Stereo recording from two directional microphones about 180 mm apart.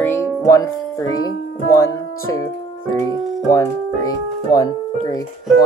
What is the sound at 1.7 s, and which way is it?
Speech, 20° left (ahead or behind).